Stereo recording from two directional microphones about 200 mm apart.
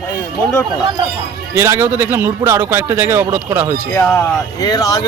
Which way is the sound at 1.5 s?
10° right (ahead or behind).